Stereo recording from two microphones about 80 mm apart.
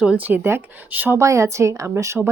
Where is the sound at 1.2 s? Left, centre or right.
Right.